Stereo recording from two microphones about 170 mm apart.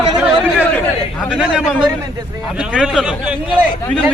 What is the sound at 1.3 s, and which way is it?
A man's voice, 5° right (ahead or behind).